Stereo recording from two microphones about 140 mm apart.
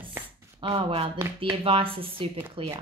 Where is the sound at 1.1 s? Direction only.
20° right (ahead or behind).